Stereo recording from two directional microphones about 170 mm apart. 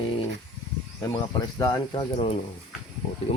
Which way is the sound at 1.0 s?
20° left (ahead or behind).